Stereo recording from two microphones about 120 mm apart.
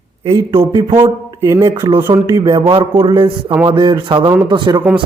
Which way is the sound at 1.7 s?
50° right (ahead or behind).